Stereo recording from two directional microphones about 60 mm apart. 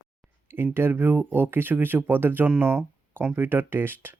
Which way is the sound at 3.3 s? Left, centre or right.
Right.